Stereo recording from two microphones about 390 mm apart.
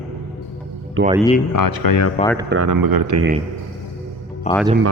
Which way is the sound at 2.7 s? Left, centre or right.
Right.